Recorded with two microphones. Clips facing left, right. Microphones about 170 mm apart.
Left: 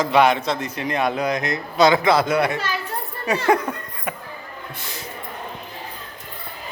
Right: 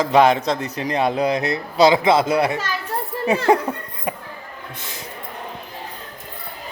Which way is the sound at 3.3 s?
30° right (ahead or behind).